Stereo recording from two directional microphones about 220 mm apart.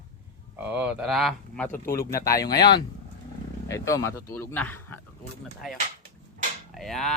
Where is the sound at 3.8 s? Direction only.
15° left (ahead or behind).